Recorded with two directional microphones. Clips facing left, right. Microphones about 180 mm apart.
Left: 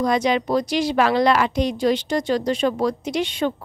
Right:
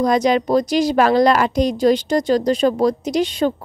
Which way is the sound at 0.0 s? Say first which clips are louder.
Right 4 dB; 40° right (ahead or behind).